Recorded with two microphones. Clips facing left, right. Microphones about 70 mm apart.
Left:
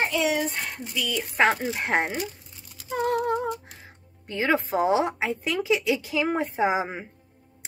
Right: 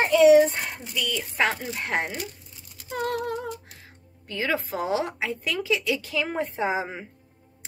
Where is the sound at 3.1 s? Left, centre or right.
Left.